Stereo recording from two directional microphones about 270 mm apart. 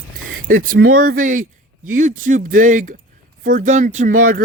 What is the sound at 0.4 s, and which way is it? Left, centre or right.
Speech, right.